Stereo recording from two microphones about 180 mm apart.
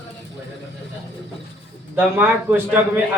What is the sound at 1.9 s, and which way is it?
Speech, 10° right (ahead or behind).